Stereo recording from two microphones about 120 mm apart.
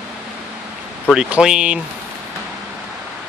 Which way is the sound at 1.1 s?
5° right (ahead or behind).